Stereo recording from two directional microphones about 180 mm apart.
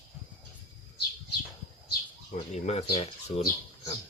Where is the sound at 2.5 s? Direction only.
35° left (ahead or behind).